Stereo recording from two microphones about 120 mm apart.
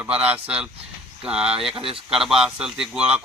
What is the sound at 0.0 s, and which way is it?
Speech, 10° right (ahead or behind).